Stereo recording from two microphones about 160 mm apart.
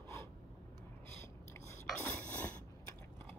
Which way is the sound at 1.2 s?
15° left (ahead or behind).